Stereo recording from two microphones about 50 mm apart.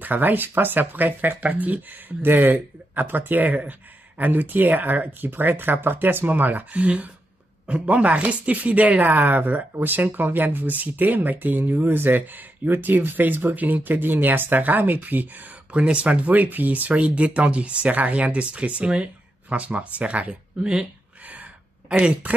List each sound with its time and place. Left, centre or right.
0.0 s speech: right
15.7 s speech: right
21.3 s a sound: right